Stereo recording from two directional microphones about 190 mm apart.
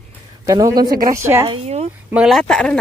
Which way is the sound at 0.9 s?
50° right (ahead or behind).